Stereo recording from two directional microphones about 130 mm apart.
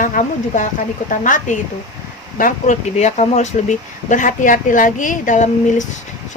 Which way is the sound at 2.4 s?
65° left (ahead or behind).